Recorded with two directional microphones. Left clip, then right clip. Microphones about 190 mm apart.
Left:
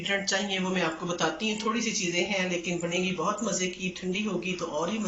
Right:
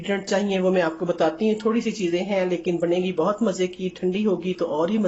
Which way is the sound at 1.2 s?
55° right (ahead or behind).